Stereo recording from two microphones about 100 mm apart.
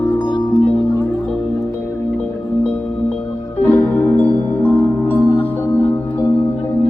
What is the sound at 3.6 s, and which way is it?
Music, 20° left (ahead or behind).